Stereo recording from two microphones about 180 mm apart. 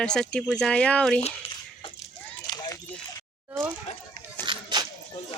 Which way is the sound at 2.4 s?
25° left (ahead or behind).